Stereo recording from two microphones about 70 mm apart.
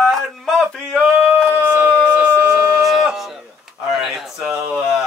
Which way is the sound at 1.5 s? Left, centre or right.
Right.